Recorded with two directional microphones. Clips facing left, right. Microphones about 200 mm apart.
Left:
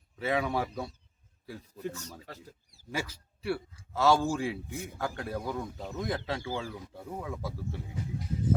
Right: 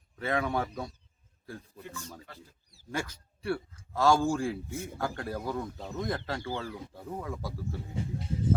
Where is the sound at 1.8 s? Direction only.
40° left (ahead or behind).